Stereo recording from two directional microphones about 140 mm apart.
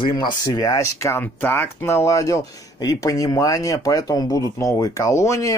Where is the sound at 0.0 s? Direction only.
35° left (ahead or behind).